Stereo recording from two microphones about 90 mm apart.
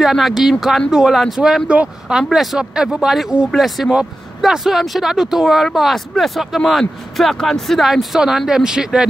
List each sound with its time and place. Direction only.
0.0 s speech: centre (ahead or behind)